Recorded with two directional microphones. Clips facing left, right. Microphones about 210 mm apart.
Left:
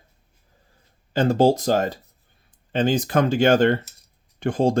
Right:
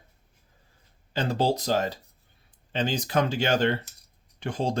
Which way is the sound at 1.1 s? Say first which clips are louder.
Left 8 dB; 50° left (ahead or behind).